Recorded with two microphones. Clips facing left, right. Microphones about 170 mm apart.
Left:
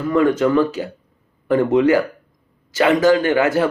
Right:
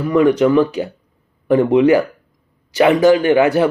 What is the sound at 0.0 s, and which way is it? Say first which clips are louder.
Speech: right 3 dB; 15° right (ahead or behind).